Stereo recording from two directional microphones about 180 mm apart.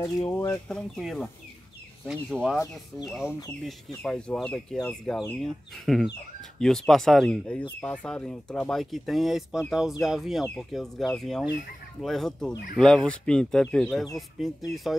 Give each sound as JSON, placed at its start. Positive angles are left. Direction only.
{"t": 0.3, "sound": "speech", "side_deg": 15}
{"t": 0.7, "sound": "speech", "side_deg": 0}
{"t": 3.3, "sound": "speech", "side_deg": 15}
{"t": 3.6, "sound": "speech", "side_deg": 5}